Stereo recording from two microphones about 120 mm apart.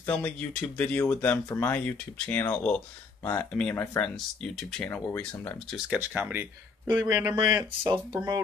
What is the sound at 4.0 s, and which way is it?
Speech, 5° left (ahead or behind).